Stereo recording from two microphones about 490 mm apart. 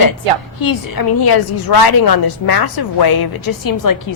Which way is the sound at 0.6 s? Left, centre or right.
Left.